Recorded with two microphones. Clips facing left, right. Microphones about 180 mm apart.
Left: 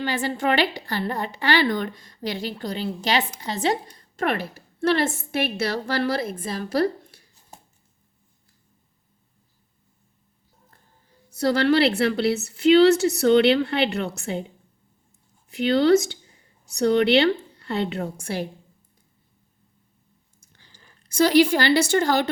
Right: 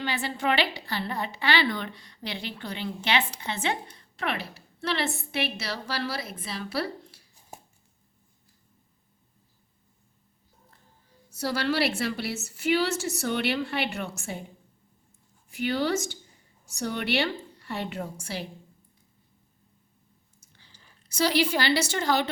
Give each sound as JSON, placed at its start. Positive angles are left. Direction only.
{"t": 0.0, "sound": "a woman's voice", "side_deg": 45}
{"t": 11.3, "sound": "a woman's voice", "side_deg": 60}
{"t": 15.4, "sound": "a woman's voice", "side_deg": 65}
{"t": 20.6, "sound": "a woman's voice", "side_deg": 50}